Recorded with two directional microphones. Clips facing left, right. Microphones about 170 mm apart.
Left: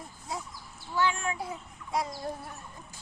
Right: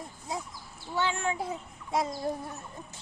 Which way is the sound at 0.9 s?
25° right (ahead or behind).